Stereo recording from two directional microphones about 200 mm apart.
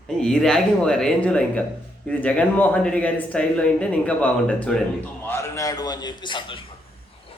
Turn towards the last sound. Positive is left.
turn(degrees=25)  # may be behind; listen again after turning